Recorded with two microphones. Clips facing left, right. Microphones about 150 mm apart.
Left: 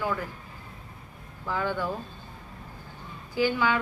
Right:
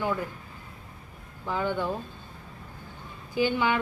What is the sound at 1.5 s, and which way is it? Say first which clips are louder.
Speech: right 1 dB; 20° right (ahead or behind).